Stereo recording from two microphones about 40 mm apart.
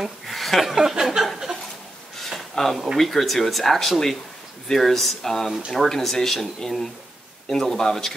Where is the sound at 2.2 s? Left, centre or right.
Centre.